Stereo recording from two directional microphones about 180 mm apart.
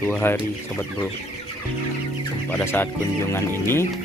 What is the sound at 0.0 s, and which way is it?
Speech, 10° left (ahead or behind).